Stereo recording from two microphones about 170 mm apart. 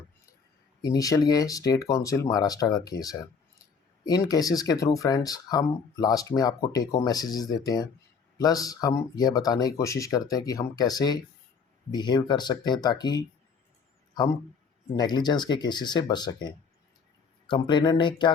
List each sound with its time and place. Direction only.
0.8 s speech: 20° left (ahead or behind)
14.9 s speech: 25° left (ahead or behind)